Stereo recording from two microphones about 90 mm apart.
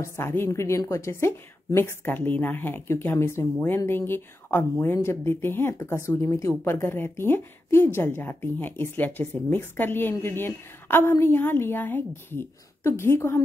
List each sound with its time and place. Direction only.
0.0 s speech: 30° left (ahead or behind)